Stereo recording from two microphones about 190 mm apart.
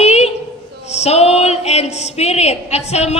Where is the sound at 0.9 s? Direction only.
35° left (ahead or behind).